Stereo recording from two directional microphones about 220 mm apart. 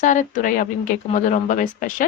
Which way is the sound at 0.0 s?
35° left (ahead or behind).